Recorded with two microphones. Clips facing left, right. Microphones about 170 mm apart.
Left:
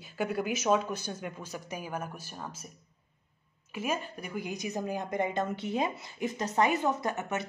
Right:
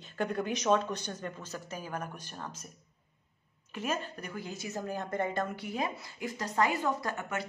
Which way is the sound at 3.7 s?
10° left (ahead or behind).